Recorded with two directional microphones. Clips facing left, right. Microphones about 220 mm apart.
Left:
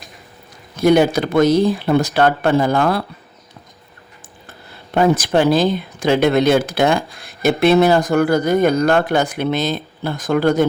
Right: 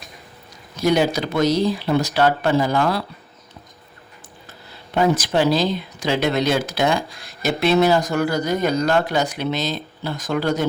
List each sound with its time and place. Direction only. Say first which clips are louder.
0.8 s speech: left 5 dB; 55° left (ahead or behind)
4.4 s speech: left 4 dB; 55° left (ahead or behind)